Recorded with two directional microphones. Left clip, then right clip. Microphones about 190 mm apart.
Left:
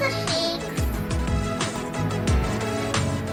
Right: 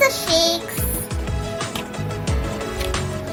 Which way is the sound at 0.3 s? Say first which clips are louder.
Right 7 dB; 20° right (ahead or behind).